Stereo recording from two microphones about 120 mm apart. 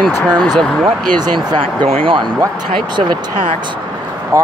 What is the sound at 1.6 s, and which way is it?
Speech, 50° right (ahead or behind).